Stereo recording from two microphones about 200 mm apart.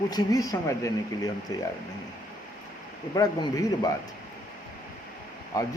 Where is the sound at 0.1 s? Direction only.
20° left (ahead or behind).